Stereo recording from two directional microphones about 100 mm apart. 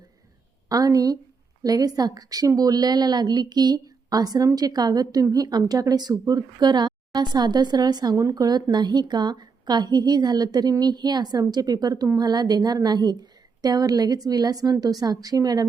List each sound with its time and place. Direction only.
0.7 s a woman's voice: 35° right (ahead or behind)